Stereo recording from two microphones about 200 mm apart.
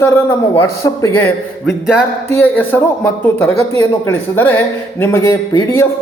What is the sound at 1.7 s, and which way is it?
Speech, centre (ahead or behind).